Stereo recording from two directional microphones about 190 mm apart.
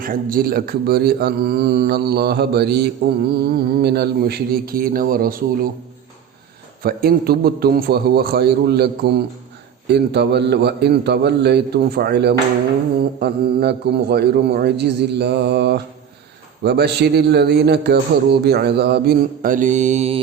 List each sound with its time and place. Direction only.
0.0 s speech: 50° right (ahead or behind)
6.8 s speech: 50° right (ahead or behind); by 20.2 s 35° right (ahead or behind)